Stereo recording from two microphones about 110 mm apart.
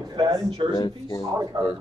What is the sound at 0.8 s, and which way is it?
Speech, 35° left (ahead or behind).